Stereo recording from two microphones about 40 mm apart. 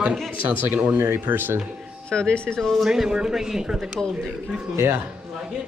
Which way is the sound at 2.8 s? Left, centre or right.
Centre.